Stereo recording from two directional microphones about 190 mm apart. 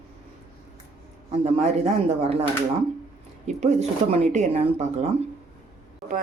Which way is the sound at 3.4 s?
35° right (ahead or behind).